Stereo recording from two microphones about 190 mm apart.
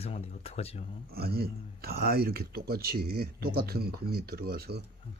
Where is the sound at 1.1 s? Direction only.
55° right (ahead or behind).